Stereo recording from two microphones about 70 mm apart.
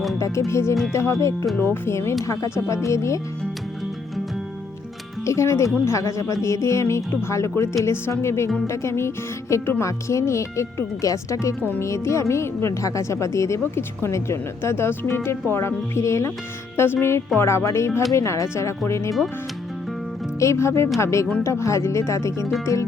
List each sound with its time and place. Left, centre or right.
0.2 s speech: left
5.2 s speech: left
16.7 s speech: left
20.4 s speech: left